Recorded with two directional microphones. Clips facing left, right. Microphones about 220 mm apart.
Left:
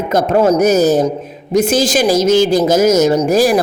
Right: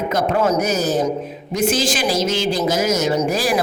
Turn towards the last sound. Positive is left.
turn(degrees=45)  # may be behind; listen again after turning